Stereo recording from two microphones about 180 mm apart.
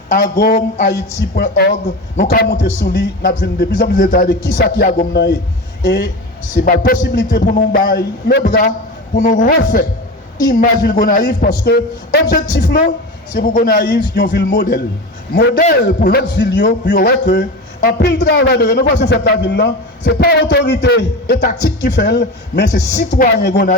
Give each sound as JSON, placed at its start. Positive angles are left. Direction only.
{"t": 0.1, "sound": "a man's voice", "side_deg": 60}
{"t": 11.6, "sound": "a man's voice", "side_deg": 65}
{"t": 13.3, "sound": "a man's voice", "side_deg": 50}
{"t": 14.1, "sound": "a man's voice", "side_deg": 65}